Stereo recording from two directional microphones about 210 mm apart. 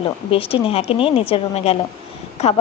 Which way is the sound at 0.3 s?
25° left (ahead or behind).